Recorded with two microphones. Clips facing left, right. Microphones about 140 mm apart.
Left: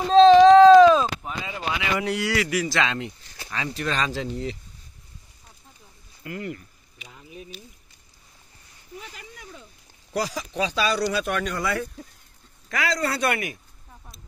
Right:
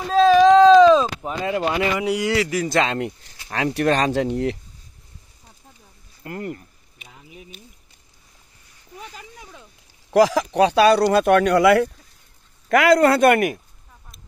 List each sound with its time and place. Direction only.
0.1 s a sound: 25° left (ahead or behind)
0.7 s chop: 10° left (ahead or behind)
1.4 s a sound: 60° right (ahead or behind)
2.0 s a man's voice: 15° right (ahead or behind)
2.3 s speech: 30° right (ahead or behind)
2.6 s a man's voice: 45° right (ahead or behind)
3.4 s speech: 60° right (ahead or behind)
6.2 s a sound: 40° right (ahead or behind)
10.1 s speech: 90° right
12.6 s a man's voice: 55° right (ahead or behind)